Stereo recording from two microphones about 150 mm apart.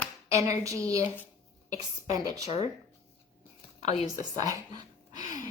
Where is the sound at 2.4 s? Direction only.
45° left (ahead or behind).